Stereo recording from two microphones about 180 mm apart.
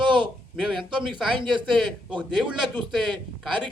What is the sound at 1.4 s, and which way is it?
Speech, 25° right (ahead or behind).